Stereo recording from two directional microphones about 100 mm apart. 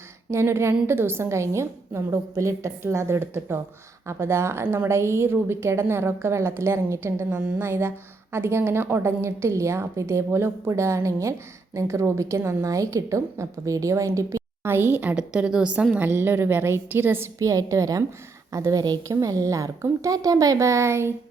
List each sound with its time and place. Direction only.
0.3 s a woman's voice: 25° right (ahead or behind)
17.4 s a woman's voice: 35° right (ahead or behind)